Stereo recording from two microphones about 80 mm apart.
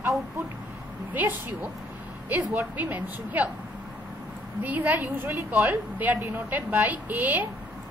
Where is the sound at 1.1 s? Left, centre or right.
Right.